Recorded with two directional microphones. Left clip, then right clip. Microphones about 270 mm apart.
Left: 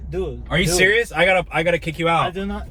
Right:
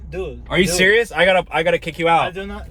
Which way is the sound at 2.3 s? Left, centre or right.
Centre.